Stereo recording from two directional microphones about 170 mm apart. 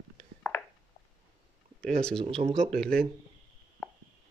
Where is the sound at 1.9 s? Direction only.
5° left (ahead or behind).